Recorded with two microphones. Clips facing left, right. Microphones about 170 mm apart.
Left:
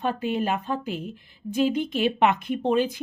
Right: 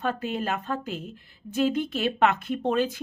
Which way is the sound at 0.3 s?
15° left (ahead or behind).